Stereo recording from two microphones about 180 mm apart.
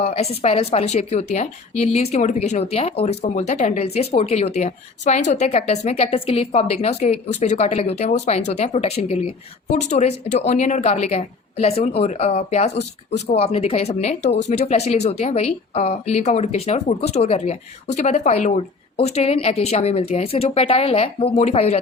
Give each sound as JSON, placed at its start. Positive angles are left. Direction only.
{"t": 0.0, "sound": "a woman's voice", "side_deg": 35}